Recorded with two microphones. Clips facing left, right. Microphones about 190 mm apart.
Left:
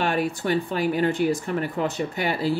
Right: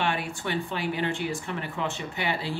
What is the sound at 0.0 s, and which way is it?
Speech, 40° left (ahead or behind).